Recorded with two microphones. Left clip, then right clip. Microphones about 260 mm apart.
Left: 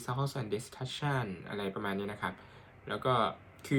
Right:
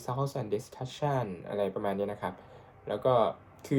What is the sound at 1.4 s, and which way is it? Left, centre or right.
Speech, left.